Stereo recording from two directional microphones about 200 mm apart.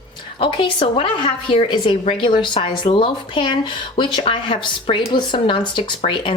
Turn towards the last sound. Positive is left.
turn(degrees=25)  # may be behind; listen again after turning